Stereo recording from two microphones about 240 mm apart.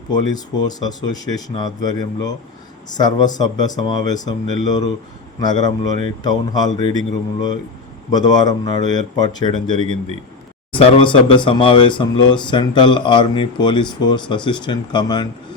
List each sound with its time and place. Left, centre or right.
0.1 s speech: centre
8.1 s speech: centre